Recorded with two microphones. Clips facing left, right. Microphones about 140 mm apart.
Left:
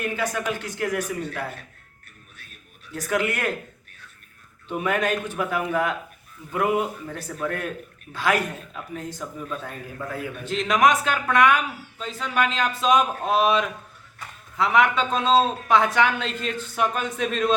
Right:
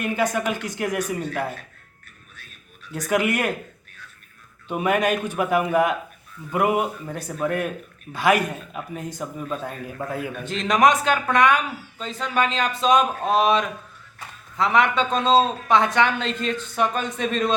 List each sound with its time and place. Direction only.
0.0 s speech: 20° right (ahead or behind)
2.9 s speech: 15° right (ahead or behind)
4.7 s speech: 15° right (ahead or behind)
9.5 s a man's voice: 30° right (ahead or behind)
10.4 s a man's voice: centre (ahead or behind)